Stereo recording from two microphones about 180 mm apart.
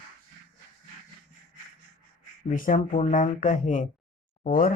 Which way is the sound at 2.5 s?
50° left (ahead or behind).